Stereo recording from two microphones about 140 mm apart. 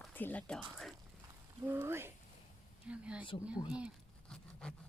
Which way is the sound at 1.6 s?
15° right (ahead or behind).